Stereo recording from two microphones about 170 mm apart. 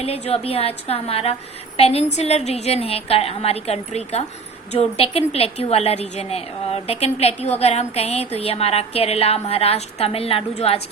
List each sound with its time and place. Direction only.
0.0 s a woman's voice: 35° left (ahead or behind)